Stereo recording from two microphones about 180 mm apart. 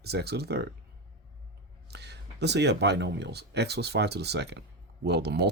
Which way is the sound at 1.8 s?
70° right (ahead or behind).